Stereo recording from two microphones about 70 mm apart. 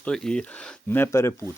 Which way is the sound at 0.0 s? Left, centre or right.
Centre.